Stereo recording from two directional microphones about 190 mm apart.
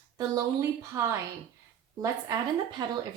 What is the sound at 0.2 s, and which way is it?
Speech, 20° right (ahead or behind).